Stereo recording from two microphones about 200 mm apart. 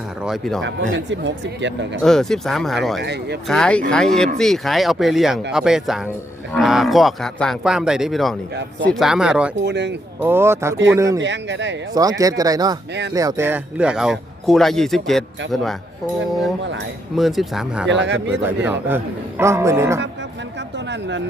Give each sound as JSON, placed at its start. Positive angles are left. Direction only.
{"t": 0.3, "sound": "a man's voice", "side_deg": 0}
{"t": 0.6, "sound": "speech", "side_deg": -70}
{"t": 2.0, "sound": "a man's voice", "side_deg": 0}
{"t": 3.0, "sound": "speech", "side_deg": -55}
{"t": 3.5, "sound": "a man's voice", "side_deg": 5}
{"t": 9.6, "sound": "speech", "side_deg": -60}
{"t": 10.2, "sound": "a man's voice", "side_deg": -10}
{"t": 11.2, "sound": "speech", "side_deg": -65}
{"t": 11.9, "sound": "a man's voice", "side_deg": -15}
{"t": 17.2, "sound": "a man's voice", "side_deg": 0}
{"t": 17.8, "sound": "speech", "side_deg": -65}
{"t": 18.3, "sound": "a man's voice", "side_deg": -10}